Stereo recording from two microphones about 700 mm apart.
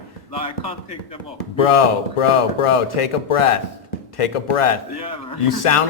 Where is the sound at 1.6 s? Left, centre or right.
Left.